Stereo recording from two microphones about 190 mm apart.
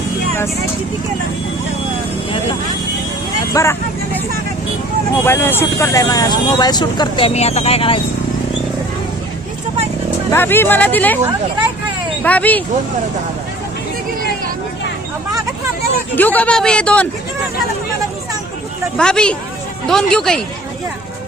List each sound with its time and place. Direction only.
3.5 s speech: 15° left (ahead or behind)
5.2 s speech: 10° left (ahead or behind); by 8.0 s 30° left (ahead or behind)
10.3 s speech: 10° left (ahead or behind)
12.2 s speech: 10° left (ahead or behind)
16.1 s speech: 10° left (ahead or behind)
18.9 s speech: 5° left (ahead or behind)